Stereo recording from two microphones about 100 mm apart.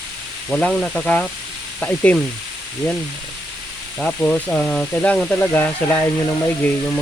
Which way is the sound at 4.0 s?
10° left (ahead or behind).